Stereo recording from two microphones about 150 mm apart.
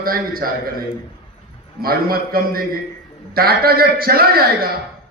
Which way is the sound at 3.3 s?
90° right.